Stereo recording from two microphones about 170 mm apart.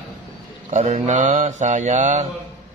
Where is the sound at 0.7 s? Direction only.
45° right (ahead or behind).